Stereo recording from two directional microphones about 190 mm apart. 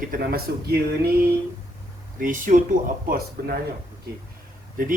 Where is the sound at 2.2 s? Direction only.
45° right (ahead or behind).